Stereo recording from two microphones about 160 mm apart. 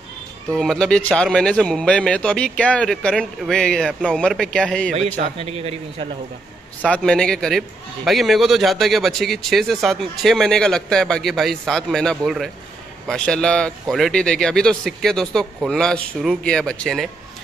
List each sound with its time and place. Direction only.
0.6 s a man's voice: centre (ahead or behind)
4.9 s a man's voice: 45° right (ahead or behind)
6.9 s a man's voice: 5° left (ahead or behind)